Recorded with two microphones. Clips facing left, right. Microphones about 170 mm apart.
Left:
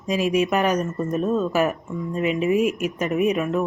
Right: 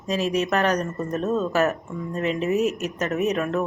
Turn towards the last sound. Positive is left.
turn(degrees=10)  # may be behind; listen again after turning